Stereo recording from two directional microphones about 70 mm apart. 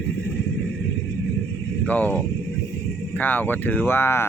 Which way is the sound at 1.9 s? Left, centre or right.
Left.